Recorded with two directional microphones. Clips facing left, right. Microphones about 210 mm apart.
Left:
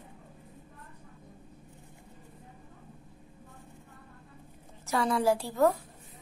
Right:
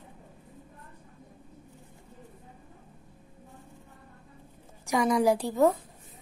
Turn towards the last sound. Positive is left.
turn(degrees=-15)  # may be behind; listen again after turning